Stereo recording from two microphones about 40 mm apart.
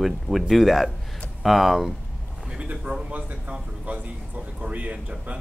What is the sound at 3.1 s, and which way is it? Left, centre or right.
Speech, right.